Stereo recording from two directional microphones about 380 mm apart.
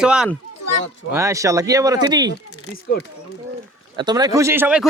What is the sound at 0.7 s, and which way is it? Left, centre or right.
Speech, left.